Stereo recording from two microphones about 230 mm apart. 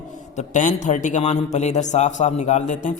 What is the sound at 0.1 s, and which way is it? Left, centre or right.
A man's voice, left.